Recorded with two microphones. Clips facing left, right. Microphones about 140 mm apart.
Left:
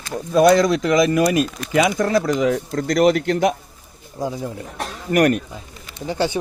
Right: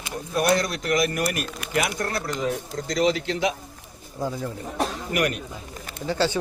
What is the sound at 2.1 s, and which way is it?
Speech, 90° left.